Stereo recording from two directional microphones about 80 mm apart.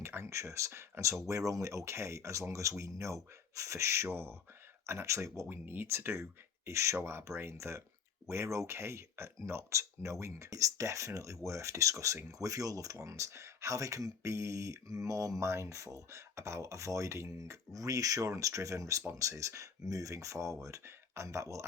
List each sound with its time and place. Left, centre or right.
0.0 s speech: right